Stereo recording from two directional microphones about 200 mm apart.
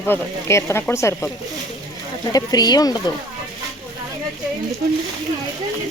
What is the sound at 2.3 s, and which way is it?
Speech, 20° left (ahead or behind).